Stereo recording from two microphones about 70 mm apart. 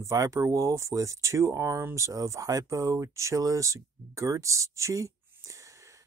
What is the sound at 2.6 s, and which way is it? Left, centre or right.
Speech, right.